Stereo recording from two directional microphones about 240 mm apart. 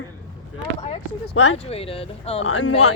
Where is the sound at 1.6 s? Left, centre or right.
Left.